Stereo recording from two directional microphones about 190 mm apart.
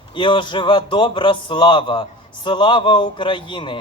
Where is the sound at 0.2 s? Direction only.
25° left (ahead or behind).